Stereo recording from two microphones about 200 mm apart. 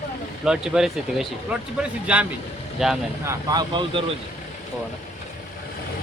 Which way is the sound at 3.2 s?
20° right (ahead or behind).